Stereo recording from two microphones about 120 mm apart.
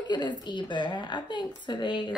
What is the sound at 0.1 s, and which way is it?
A woman's voice, 35° left (ahead or behind).